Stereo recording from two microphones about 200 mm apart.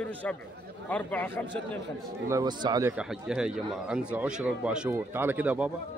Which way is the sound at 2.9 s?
5° right (ahead or behind).